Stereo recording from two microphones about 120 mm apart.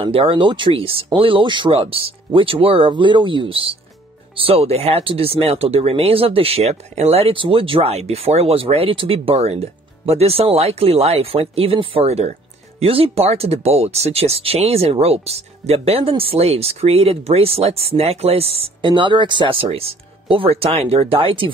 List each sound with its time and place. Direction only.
0.0 s speech: 50° right (ahead or behind)